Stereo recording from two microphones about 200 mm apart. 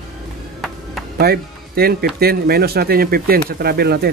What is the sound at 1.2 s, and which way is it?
Speech, 50° right (ahead or behind).